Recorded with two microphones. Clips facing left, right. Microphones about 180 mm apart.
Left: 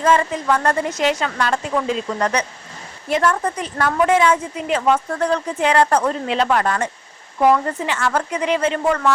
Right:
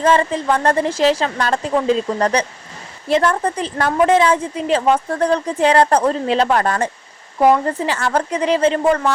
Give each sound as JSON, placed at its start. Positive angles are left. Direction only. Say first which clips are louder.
{"t": 0.0, "sound": "a woman's voice", "louder": "right 2 dB", "side_deg": -30}